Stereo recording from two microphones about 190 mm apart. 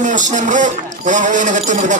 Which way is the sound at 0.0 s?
40° right (ahead or behind).